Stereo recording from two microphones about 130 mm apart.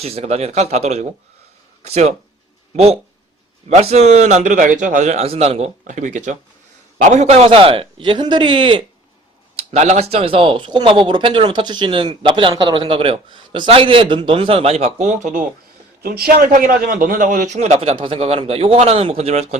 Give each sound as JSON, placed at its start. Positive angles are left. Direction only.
{"t": 0.0, "sound": "a man's voice", "side_deg": -55}
{"t": 5.8, "sound": "speech", "side_deg": -75}
{"t": 7.1, "sound": "speech", "side_deg": -55}
{"t": 9.6, "sound": "speech", "side_deg": -60}
{"t": 16.5, "sound": "a man's voice", "side_deg": -90}
{"t": 17.7, "sound": "speech", "side_deg": -40}